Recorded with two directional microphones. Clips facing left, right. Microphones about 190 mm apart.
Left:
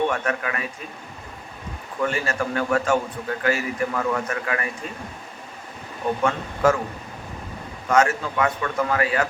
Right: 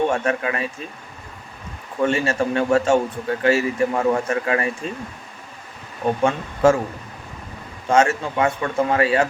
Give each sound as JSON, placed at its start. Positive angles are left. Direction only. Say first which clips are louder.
{"t": 0.1, "sound": "speech", "louder": "right 4 dB", "side_deg": -25}
{"t": 2.0, "sound": "speech", "louder": "right 5 dB", "side_deg": -25}
{"t": 6.2, "sound": "speech", "louder": "right 4 dB", "side_deg": -25}
{"t": 7.9, "sound": "speech", "louder": "right 2 dB", "side_deg": -25}